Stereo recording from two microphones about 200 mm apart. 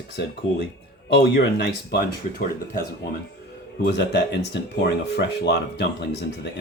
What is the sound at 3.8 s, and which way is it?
A man's voice, 55° left (ahead or behind).